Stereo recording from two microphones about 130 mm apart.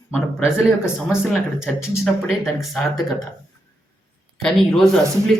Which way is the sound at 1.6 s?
Centre (ahead or behind).